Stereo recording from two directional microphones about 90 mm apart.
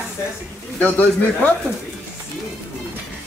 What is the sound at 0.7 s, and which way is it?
Speech, 20° left (ahead or behind).